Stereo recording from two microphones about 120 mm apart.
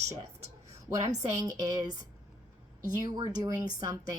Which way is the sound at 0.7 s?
25° right (ahead or behind).